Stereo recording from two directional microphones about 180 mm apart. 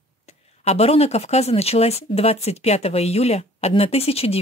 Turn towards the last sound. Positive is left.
turn(degrees=35)  # may be behind; listen again after turning